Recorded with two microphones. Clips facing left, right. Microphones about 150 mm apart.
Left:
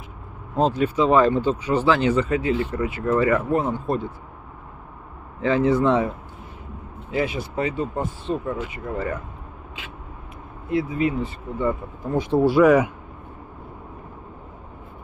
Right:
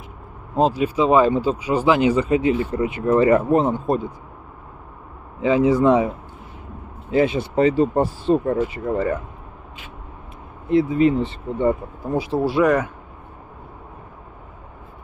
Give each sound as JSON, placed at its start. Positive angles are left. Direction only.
{"t": 0.6, "sound": "speech", "side_deg": -10}
{"t": 5.4, "sound": "speech", "side_deg": -10}
{"t": 7.1, "sound": "speech", "side_deg": -30}
{"t": 8.6, "sound": "speech", "side_deg": -30}
{"t": 10.7, "sound": "speech", "side_deg": -25}
{"t": 12.0, "sound": "speech", "side_deg": -10}